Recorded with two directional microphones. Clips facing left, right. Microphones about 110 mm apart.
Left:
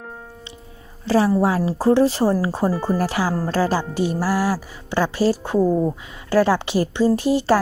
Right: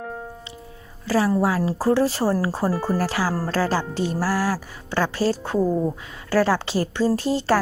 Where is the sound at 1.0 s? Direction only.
25° left (ahead or behind).